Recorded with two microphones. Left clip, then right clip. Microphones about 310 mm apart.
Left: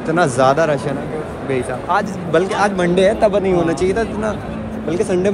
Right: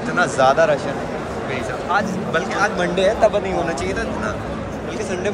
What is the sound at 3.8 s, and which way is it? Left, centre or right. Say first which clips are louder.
Speech: left 5 dB; centre.